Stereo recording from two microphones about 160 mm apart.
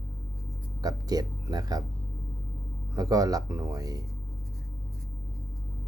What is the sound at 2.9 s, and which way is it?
Speech, 20° right (ahead or behind).